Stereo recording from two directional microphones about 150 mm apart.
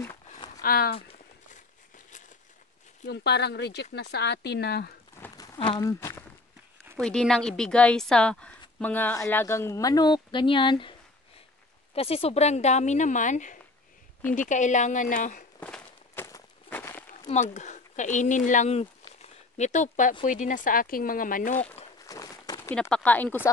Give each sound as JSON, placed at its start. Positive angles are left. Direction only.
{"t": 0.6, "sound": "speech", "side_deg": 80}
{"t": 0.9, "sound": "speech", "side_deg": 40}
{"t": 3.4, "sound": "speech", "side_deg": 90}
{"t": 5.2, "sound": "a sound", "side_deg": 20}
{"t": 5.6, "sound": "speech", "side_deg": 30}
{"t": 7.0, "sound": "a woman's voice", "side_deg": 5}
{"t": 15.6, "sound": "walk", "side_deg": 10}
{"t": 17.3, "sound": "a woman's voice", "side_deg": 50}
{"t": 22.0, "sound": "walk", "side_deg": 25}
{"t": 22.8, "sound": "speech", "side_deg": 5}